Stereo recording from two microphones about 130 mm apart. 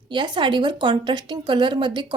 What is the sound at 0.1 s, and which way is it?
A woman's voice, 35° right (ahead or behind).